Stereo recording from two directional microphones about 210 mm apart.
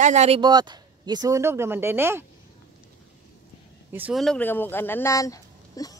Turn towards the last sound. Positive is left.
turn(degrees=15)  # may be behind; listen again after turning